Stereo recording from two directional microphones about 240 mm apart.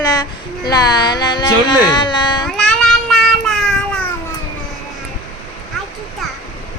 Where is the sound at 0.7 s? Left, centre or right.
Centre.